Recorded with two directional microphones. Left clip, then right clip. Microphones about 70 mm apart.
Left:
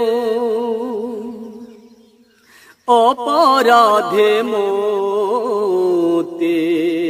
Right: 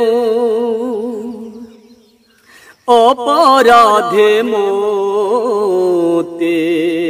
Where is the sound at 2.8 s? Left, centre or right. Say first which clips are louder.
Right 4 dB; left.